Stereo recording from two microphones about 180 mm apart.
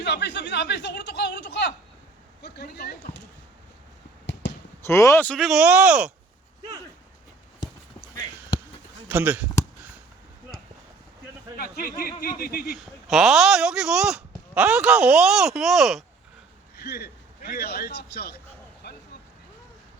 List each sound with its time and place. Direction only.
0.0 s speech: 70° left (ahead or behind)
2.4 s speech: 65° left (ahead or behind)
4.9 s speech: 15° left (ahead or behind); by 6.1 s 5° right (ahead or behind)
9.0 s speech: 10° right (ahead or behind)
11.5 s speech: 55° left (ahead or behind)
12.7 s speech: centre (ahead or behind)
16.8 s a man's voice: 65° left (ahead or behind)